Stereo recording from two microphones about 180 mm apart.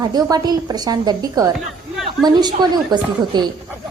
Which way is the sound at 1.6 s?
Centre (ahead or behind).